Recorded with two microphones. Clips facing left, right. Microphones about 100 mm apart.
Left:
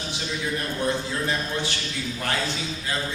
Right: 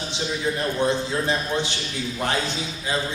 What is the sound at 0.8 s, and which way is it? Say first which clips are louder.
A man's voice: right 2 dB; 20° right (ahead or behind).